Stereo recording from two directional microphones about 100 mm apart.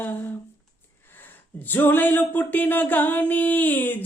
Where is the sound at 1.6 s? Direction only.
20° left (ahead or behind).